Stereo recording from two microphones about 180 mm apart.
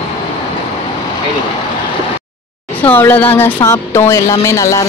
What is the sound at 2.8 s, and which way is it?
Speech, 10° left (ahead or behind).